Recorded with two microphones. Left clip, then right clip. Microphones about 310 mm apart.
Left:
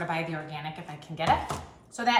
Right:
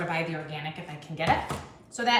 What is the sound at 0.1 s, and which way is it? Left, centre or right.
A woman's voice, centre.